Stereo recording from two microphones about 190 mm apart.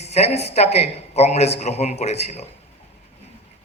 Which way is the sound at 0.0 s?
35° left (ahead or behind).